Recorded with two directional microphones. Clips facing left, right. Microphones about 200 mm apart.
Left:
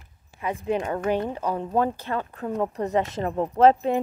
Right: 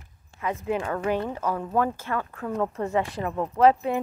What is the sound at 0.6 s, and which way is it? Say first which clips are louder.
Speech: left 3 dB; 20° left (ahead or behind).